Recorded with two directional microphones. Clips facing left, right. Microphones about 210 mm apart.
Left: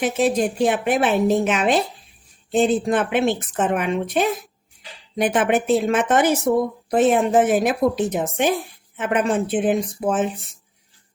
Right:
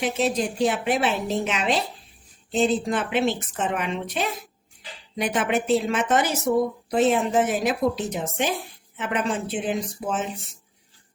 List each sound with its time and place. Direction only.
0.0 s a woman's voice: 50° left (ahead or behind)